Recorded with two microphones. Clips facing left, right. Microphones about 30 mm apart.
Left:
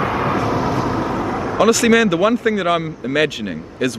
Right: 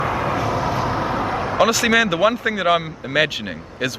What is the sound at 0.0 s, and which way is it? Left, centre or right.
Vehicle, centre.